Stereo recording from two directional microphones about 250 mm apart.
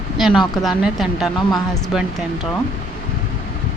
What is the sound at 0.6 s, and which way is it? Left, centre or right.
Speech, centre.